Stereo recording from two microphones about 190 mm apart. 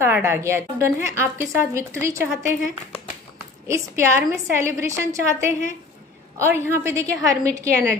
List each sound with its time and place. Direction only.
0.0 s speech: 10° right (ahead or behind)
3.6 s speech: 15° right (ahead or behind)